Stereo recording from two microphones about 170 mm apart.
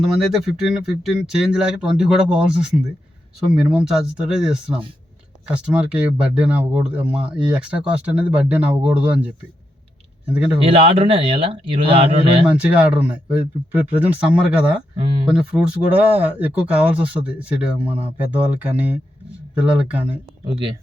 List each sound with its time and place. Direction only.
0.0 s speech: centre (ahead or behind)
10.2 s speech: 10° right (ahead or behind)
10.6 s speech: 30° right (ahead or behind)
12.5 s speech: 5° right (ahead or behind)
14.9 s speech: 30° right (ahead or behind)
15.3 s speech: 5° right (ahead or behind)
20.5 s speech: 25° right (ahead or behind)